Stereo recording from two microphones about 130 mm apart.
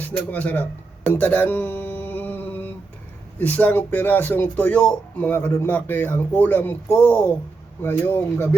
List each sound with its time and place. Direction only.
0.0 s speech: 10° left (ahead or behind)
1.1 s a sound: 15° left (ahead or behind)
3.3 s speech: 15° left (ahead or behind)